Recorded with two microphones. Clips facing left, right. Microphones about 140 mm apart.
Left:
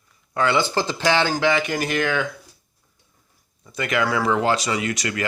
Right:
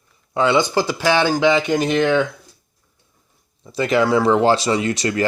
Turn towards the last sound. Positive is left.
turn(degrees=-30)  # may be behind; listen again after turning